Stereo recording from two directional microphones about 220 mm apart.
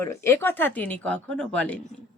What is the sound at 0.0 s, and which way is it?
Speech, 10° left (ahead or behind).